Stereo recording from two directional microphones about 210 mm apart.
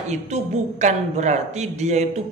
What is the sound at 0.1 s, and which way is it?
Speech, 35° right (ahead or behind).